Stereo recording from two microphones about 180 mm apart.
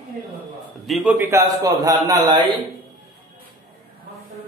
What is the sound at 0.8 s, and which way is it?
Speech, centre (ahead or behind).